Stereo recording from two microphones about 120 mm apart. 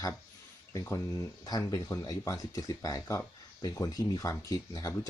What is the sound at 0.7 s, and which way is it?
Speech, 25° left (ahead or behind).